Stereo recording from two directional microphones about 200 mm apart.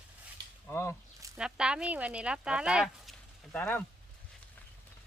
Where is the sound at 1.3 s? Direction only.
5° right (ahead or behind).